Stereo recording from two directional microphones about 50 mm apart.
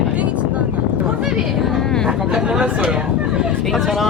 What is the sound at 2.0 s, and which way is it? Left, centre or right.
Speech, centre.